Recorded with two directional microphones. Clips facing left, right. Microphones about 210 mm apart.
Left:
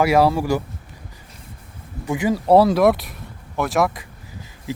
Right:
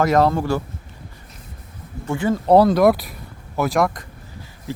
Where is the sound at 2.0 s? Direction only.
10° left (ahead or behind).